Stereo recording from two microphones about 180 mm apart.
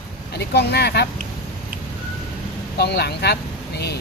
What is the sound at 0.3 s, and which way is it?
Speech, 65° left (ahead or behind).